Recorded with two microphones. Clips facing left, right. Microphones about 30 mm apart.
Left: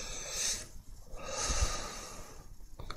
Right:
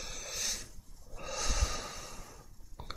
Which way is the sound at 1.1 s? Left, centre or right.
Centre.